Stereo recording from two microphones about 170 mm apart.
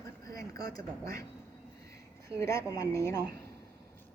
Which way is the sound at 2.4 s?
20° left (ahead or behind).